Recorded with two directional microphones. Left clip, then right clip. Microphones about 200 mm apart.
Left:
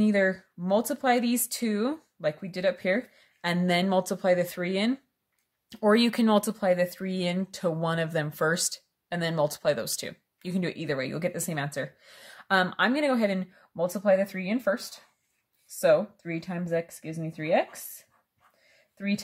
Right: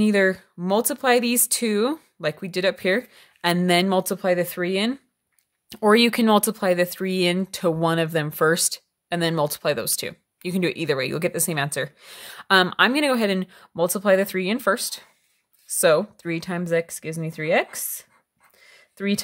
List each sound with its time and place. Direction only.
0.0 s speech: 35° right (ahead or behind)
18.9 s speech: 45° right (ahead or behind)